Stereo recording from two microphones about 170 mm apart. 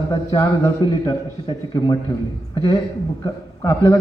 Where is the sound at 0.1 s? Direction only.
25° left (ahead or behind).